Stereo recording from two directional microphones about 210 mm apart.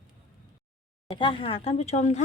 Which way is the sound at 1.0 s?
25° left (ahead or behind).